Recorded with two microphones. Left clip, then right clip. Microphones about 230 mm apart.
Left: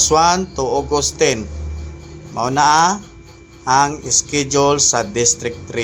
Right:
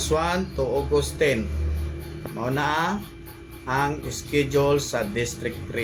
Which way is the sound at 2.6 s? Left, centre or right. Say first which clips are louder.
Left 13 dB; left.